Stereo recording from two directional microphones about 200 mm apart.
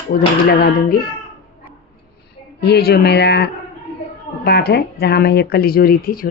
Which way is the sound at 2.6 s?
55° left (ahead or behind).